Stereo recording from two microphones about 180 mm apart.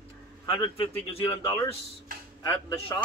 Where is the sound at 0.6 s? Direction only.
30° left (ahead or behind).